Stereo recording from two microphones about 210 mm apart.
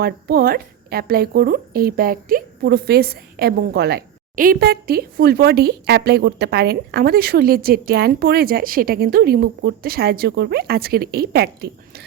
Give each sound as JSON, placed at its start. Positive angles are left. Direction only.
{"t": 0.0, "sound": "speech", "side_deg": -45}